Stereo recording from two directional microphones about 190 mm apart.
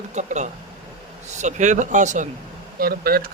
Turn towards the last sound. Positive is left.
turn(degrees=-50)  # may be behind; listen again after turning